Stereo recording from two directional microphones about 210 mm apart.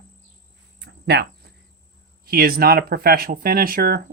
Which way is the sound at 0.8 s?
55° right (ahead or behind).